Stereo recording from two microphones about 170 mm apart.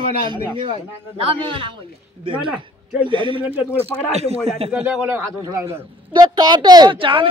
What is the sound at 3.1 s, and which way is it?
A woman's voice, 30° right (ahead or behind).